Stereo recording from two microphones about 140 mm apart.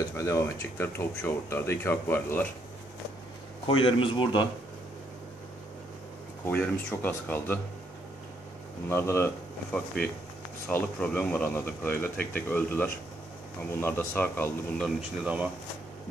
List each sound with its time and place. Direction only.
0.2 s speech: 20° left (ahead or behind)
3.6 s a man's voice: 40° left (ahead or behind)
6.4 s speech: 10° left (ahead or behind)
8.8 s speech: 15° left (ahead or behind)
15.2 s speech: 10° right (ahead or behind)